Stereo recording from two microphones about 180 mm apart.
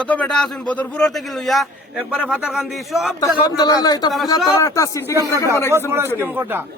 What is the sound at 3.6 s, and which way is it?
A man's voice, 20° left (ahead or behind).